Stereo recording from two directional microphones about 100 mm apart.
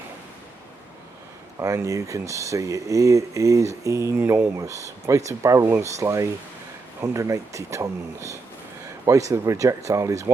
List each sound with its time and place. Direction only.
1.6 s speech: 30° right (ahead or behind)